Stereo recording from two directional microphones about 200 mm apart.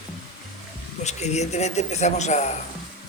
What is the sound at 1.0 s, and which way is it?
Speech, 35° left (ahead or behind).